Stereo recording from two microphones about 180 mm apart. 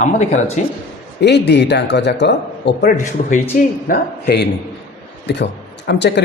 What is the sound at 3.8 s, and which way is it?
Speech, 60° left (ahead or behind).